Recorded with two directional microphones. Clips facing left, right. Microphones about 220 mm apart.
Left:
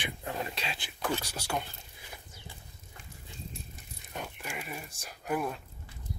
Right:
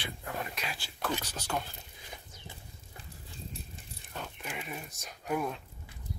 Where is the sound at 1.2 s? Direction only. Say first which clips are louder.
Left 1 dB; 10° left (ahead or behind).